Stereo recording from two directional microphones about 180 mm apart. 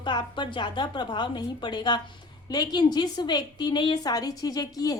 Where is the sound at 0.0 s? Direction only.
25° left (ahead or behind).